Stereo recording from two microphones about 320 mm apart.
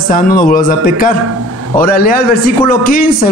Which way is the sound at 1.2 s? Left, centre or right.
Right.